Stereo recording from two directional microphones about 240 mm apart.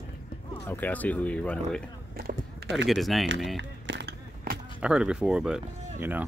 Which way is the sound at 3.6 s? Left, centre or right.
Right.